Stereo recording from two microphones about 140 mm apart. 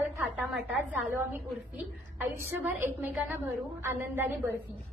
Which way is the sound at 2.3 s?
15° right (ahead or behind).